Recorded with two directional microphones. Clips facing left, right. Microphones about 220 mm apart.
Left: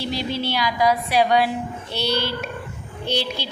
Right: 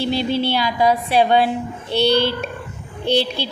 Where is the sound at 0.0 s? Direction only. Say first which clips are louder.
Right 6 dB; 30° right (ahead or behind).